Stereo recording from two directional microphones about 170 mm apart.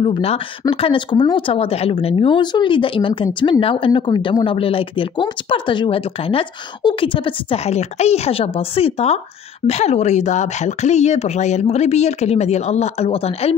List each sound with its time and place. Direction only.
0.0 s speech: 35° left (ahead or behind)